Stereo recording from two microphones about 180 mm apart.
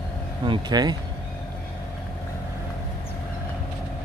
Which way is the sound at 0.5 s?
25° right (ahead or behind).